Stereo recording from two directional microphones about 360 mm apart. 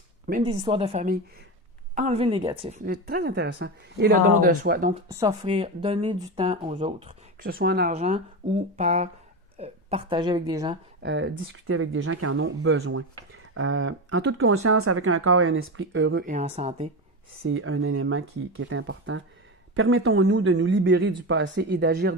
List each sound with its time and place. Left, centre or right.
0.3 s speech: centre
5.0 s speech: centre
11.0 s speech: right
17.4 s speech: right